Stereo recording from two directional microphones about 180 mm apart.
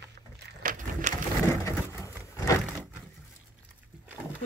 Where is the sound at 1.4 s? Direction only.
15° left (ahead or behind).